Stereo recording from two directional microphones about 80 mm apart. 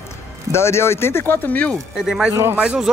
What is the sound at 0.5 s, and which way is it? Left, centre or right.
Speech, left.